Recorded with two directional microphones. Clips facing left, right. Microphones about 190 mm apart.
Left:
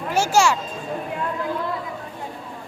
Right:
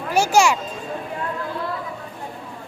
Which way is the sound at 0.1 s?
15° right (ahead or behind).